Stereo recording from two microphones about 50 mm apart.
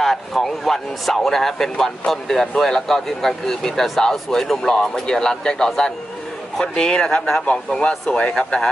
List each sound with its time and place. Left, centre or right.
0.0 s speech: centre
7.4 s speech: left